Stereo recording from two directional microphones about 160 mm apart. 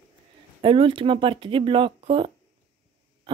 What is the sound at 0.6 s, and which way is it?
Speech, 35° right (ahead or behind).